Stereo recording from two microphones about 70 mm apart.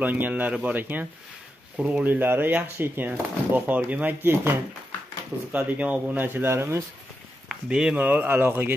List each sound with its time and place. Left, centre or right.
0.0 s speech: right
5.5 s speech: right
7.4 s speech: centre
8.0 s speech: right